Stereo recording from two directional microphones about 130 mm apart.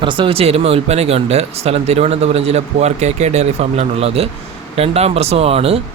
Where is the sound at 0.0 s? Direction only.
40° right (ahead or behind).